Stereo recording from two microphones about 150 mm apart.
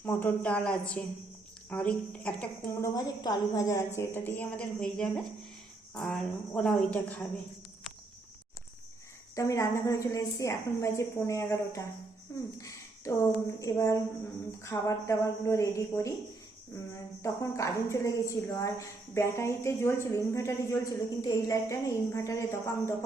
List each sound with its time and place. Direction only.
0.0 s a woman's voice: 15° left (ahead or behind)
9.3 s a woman's voice: 20° left (ahead or behind)
17.2 s a woman's voice: 20° left (ahead or behind)